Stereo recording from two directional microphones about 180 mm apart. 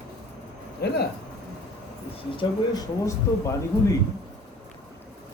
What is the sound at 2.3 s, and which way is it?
Speech, 20° left (ahead or behind).